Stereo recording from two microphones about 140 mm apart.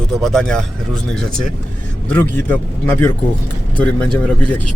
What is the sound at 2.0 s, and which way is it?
Speech, 10° left (ahead or behind).